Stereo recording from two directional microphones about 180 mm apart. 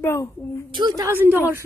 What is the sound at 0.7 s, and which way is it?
Speech, 25° right (ahead or behind).